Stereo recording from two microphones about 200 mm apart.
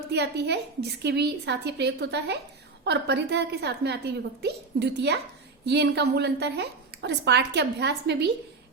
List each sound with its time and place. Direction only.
0.1 s a woman's voice: 55° right (ahead or behind)